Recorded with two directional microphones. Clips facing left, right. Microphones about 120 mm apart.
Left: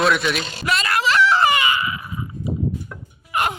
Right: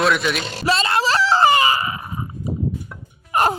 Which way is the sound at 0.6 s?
30° right (ahead or behind).